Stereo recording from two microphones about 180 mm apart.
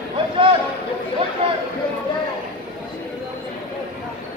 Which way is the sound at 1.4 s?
30° right (ahead or behind).